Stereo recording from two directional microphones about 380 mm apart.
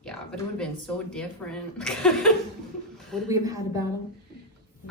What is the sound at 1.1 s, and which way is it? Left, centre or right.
Speech, centre.